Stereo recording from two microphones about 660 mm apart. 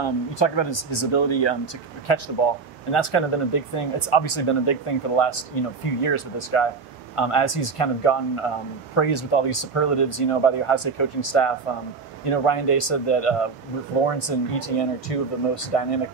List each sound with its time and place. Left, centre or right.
0.0 s speech: left